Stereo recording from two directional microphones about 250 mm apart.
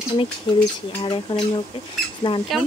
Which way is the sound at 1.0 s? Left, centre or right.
Centre.